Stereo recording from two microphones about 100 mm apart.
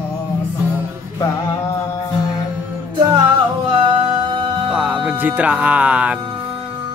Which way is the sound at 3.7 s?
55° right (ahead or behind).